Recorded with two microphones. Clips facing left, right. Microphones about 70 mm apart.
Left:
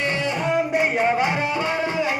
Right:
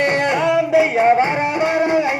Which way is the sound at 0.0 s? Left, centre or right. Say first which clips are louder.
Right 7 dB; right.